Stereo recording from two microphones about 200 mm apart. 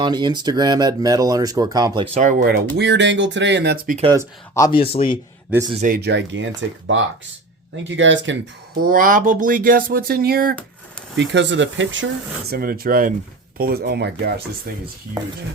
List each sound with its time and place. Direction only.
0.0 s speech: 20° right (ahead or behind)
2.1 s speech: 45° right (ahead or behind)
2.7 s speech: 60° right (ahead or behind)
4.5 s speech: 15° left (ahead or behind)
4.8 s speech: 30° left (ahead or behind)
5.8 s speech: 45° right (ahead or behind)
6.1 s speech: 65° right (ahead or behind)
8.8 s speech: 45° right (ahead or behind)
11.2 s speech: 65° right (ahead or behind)
12.5 s speech: 50° right (ahead or behind)